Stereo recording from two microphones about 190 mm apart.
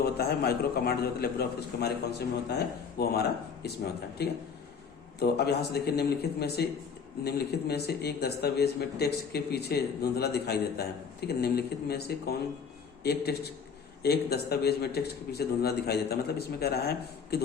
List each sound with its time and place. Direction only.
0.0 s speech: 55° left (ahead or behind)
5.2 s a man's voice: 60° left (ahead or behind)